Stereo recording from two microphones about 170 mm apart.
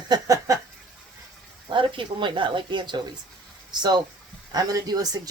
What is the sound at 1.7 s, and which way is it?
Speech, 30° right (ahead or behind).